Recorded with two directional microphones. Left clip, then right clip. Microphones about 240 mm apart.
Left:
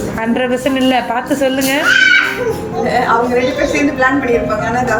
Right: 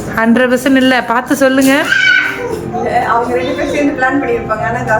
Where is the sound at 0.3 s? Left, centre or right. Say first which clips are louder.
Right 3 dB; centre.